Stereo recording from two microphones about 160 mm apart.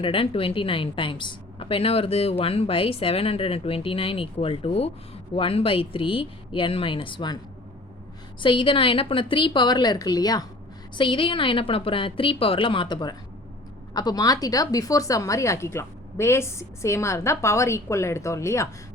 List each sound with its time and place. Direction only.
0.0 s a woman's voice: 35° left (ahead or behind)
8.4 s a woman's voice: 30° left (ahead or behind)